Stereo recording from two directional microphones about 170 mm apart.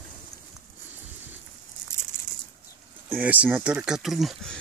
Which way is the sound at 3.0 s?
10° right (ahead or behind).